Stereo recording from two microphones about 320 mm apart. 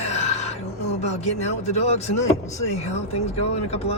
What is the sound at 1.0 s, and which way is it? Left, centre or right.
Speech, left.